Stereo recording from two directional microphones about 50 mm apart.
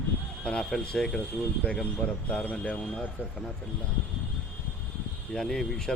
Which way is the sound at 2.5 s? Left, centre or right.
Left.